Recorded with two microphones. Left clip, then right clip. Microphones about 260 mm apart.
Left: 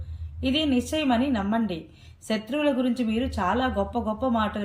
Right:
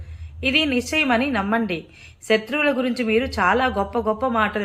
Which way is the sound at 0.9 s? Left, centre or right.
Right.